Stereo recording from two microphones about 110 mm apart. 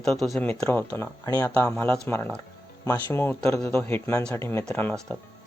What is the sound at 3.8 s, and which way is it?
Speech, 20° left (ahead or behind).